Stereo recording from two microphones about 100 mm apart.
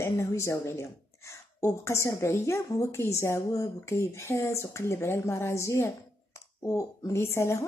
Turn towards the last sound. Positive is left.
turn(degrees=30)  # may be behind; listen again after turning